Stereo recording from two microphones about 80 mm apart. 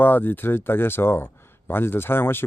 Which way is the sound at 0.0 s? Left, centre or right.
Left.